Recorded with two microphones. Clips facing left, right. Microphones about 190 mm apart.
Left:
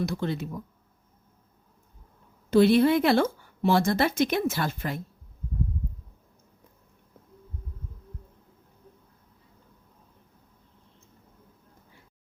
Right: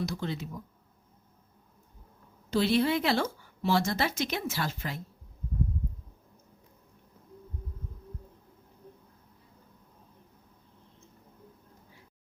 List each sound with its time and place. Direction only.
0.0 s speech: 55° left (ahead or behind)
2.5 s speech: 55° left (ahead or behind)